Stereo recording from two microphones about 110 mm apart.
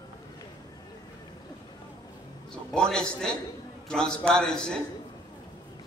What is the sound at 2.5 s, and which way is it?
A man's voice, 5° left (ahead or behind).